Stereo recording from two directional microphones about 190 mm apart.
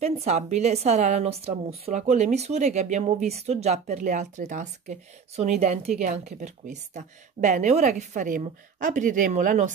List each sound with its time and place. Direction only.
0.0 s a woman's voice: 35° right (ahead or behind)